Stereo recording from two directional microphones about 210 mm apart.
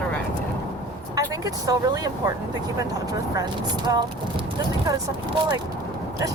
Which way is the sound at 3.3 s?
20° right (ahead or behind).